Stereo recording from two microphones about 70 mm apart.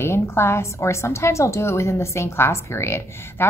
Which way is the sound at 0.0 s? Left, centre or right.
Left.